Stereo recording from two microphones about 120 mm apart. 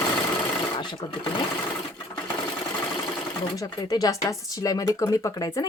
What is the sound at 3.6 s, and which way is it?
Speech, 30° left (ahead or behind).